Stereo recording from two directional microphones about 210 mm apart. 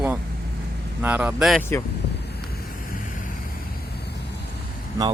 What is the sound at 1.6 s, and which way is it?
Speech, 10° left (ahead or behind).